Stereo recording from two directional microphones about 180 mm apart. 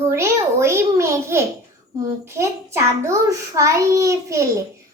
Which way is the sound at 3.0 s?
15° right (ahead or behind).